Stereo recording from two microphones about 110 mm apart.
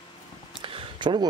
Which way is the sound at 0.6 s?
50° right (ahead or behind).